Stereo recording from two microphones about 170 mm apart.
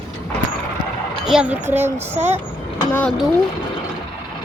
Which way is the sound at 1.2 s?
5° right (ahead or behind).